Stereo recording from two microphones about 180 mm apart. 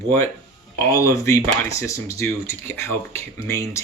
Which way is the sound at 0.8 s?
15° left (ahead or behind).